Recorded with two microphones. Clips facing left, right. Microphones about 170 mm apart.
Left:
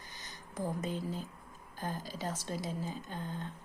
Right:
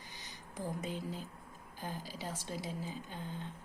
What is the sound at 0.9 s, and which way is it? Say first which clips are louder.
Speech: left 3 dB; 10° right (ahead or behind).